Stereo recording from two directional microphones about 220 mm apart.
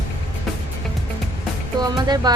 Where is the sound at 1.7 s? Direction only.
20° right (ahead or behind).